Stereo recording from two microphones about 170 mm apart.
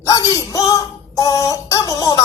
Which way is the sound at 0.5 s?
20° left (ahead or behind).